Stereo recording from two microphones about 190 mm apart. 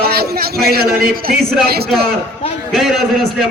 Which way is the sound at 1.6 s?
55° right (ahead or behind).